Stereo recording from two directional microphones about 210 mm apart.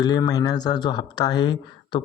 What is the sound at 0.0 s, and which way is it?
Speech, 20° left (ahead or behind).